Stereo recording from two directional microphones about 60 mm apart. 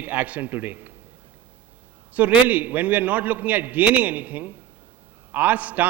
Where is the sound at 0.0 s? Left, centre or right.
Right.